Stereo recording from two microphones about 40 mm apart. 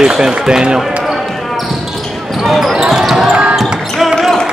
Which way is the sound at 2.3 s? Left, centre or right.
Centre.